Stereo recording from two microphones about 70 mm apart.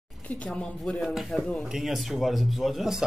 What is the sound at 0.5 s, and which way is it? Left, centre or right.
Speech, centre.